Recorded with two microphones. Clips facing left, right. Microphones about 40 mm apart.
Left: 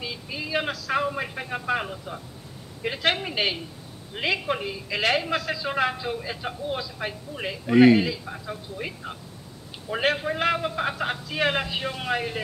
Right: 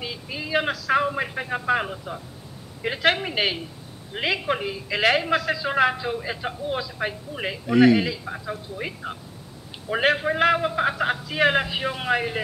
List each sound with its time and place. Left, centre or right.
0.0 s a sound: centre
2.8 s a man's voice: centre
7.6 s speech: centre
8.3 s a man's voice: centre